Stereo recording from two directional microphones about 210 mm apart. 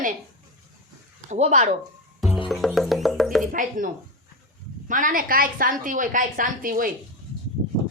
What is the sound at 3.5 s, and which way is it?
Speech, 40° right (ahead or behind).